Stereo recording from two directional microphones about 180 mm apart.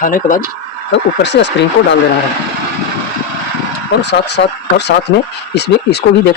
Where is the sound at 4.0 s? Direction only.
70° left (ahead or behind).